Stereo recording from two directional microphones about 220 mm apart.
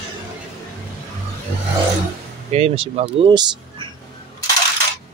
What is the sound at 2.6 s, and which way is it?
Speech, 25° right (ahead or behind).